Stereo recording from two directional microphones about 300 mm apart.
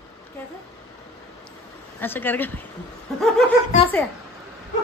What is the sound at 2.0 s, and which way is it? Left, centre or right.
Speech, centre.